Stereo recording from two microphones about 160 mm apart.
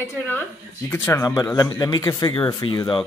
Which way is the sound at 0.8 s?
15° left (ahead or behind).